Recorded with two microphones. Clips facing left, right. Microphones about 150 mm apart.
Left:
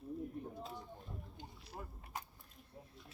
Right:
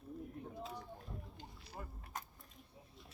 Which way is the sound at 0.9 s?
Centre (ahead or behind).